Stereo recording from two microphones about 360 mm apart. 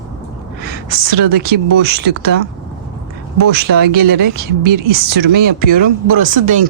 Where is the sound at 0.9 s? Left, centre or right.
Right.